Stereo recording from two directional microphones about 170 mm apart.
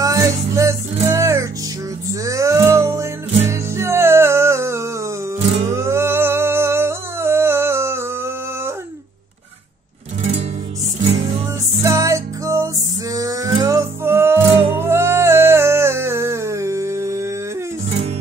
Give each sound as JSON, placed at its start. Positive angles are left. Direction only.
{"t": 0.0, "sound": "music", "side_deg": -20}
{"t": 5.7, "sound": "humming", "side_deg": -15}
{"t": 11.8, "sound": "music", "side_deg": -20}